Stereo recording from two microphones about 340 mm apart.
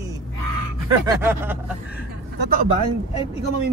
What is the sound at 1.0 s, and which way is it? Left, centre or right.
Speech, centre.